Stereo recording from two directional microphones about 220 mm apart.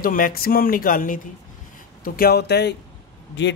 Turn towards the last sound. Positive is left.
turn(degrees=55)  # may be behind; listen again after turning